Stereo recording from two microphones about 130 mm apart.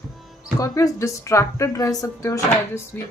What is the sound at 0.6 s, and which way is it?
A woman's voice, 25° left (ahead or behind).